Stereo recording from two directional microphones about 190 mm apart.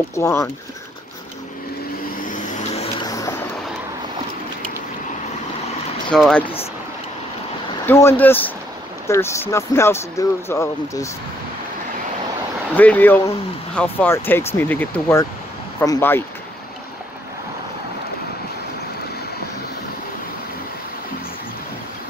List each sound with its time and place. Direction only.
0.1 s speech: 15° left (ahead or behind)
2.2 s vehicle: 40° left (ahead or behind)
3.1 s vehicle: 20° left (ahead or behind)
6.0 s speech: 5° left (ahead or behind)
6.4 s speech: 30° left (ahead or behind)
7.8 s speech: 15° left (ahead or behind)
12.7 s speech: 10° left (ahead or behind)